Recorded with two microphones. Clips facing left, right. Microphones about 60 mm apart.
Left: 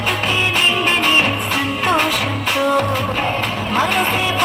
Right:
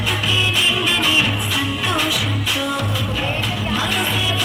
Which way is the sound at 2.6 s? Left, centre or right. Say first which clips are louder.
Left 6 dB; left.